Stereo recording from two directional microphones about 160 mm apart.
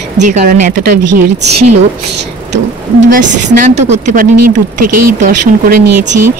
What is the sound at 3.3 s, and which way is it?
Speech, 45° right (ahead or behind).